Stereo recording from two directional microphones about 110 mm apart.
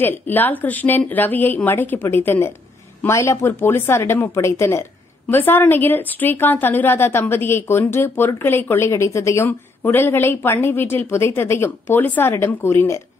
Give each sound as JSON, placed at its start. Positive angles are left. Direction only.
{"t": 0.0, "sound": "a woman's voice", "side_deg": 15}